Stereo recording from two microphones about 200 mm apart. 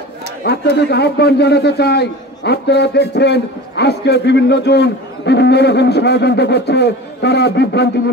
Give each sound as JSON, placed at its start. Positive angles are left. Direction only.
{"t": 0.4, "sound": "a man's voice", "side_deg": 55}